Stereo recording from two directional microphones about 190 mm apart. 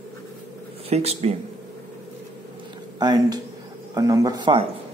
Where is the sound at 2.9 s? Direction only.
20° right (ahead or behind).